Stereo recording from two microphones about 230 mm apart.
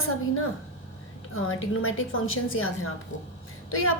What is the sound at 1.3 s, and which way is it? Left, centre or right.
A woman's voice, left.